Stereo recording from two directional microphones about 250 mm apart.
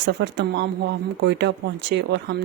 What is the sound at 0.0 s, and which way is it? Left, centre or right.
Speech, right.